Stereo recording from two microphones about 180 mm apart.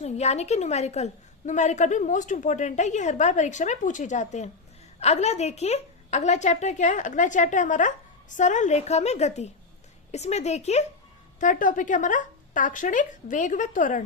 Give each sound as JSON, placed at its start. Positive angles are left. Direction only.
{"t": 0.0, "sound": "a woman's voice", "side_deg": 35}